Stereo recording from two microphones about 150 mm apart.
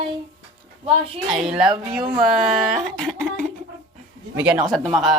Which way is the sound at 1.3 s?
5° right (ahead or behind).